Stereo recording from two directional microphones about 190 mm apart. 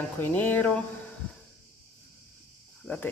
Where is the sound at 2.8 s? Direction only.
10° left (ahead or behind).